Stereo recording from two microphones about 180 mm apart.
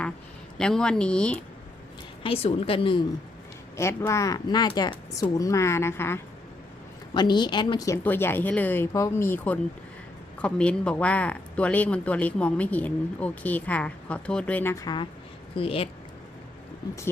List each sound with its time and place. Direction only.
0.6 s speech: 5° left (ahead or behind)
2.2 s a woman's voice: 30° left (ahead or behind)
3.8 s speech: 15° left (ahead or behind)
7.1 s a woman's voice: 25° left (ahead or behind)
8.0 s speech: 10° left (ahead or behind)
15.5 s speech: 30° left (ahead or behind)